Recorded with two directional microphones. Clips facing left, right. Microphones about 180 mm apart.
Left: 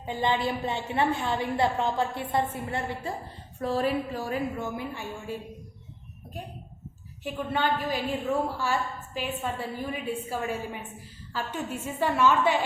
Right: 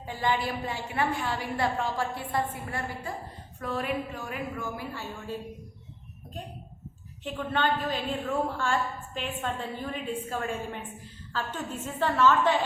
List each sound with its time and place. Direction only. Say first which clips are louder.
0.0 s a woman's voice: left 2 dB; 20° left (ahead or behind)
7.3 s a woman's voice: even; 10° left (ahead or behind)